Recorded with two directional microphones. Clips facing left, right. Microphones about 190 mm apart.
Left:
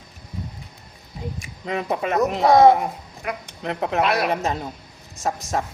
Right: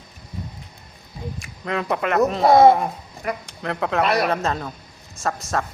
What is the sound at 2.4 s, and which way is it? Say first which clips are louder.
Speech: right 1 dB; 5° right (ahead or behind).